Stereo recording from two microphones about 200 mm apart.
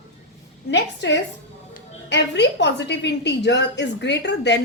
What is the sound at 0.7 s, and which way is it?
A woman's voice, 60° left (ahead or behind).